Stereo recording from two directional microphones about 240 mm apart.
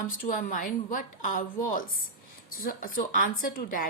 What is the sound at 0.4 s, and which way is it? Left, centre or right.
Speech, left.